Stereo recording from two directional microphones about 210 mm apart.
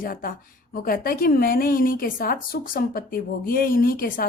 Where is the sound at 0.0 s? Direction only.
40° left (ahead or behind).